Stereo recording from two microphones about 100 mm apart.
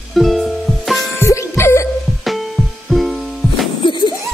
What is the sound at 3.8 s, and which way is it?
Music, 50° left (ahead or behind).